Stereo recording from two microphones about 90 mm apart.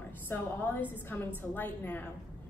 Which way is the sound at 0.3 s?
25° left (ahead or behind).